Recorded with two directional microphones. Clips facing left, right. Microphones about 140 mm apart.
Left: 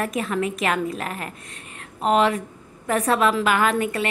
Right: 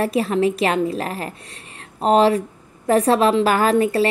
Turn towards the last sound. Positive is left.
turn(degrees=-30)  # may be behind; listen again after turning